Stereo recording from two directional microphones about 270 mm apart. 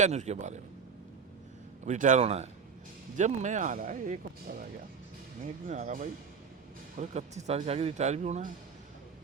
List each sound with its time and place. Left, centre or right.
0.0 s speech: right
1.8 s speech: right